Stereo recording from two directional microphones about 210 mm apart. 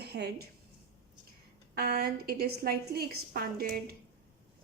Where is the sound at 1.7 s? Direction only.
45° right (ahead or behind).